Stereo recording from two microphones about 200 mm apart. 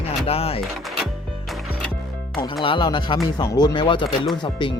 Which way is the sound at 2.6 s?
25° left (ahead or behind).